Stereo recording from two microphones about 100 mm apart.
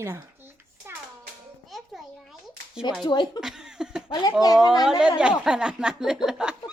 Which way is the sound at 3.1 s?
45° left (ahead or behind).